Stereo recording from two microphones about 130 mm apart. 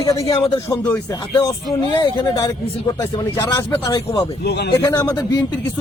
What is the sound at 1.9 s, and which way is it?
Speech, 30° left (ahead or behind).